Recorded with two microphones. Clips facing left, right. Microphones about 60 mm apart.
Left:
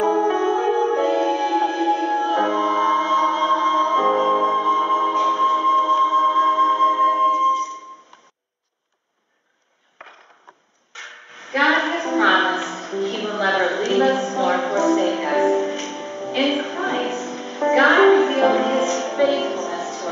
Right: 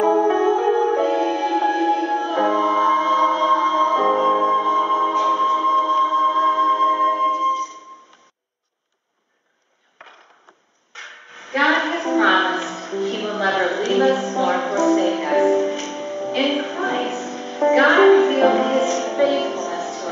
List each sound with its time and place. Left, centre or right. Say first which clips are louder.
0.3 s music: right 2 dB; right
0.6 s music: right 1 dB; centre
7.2 s music: left 2 dB; centre
10.9 s a sound: even; centre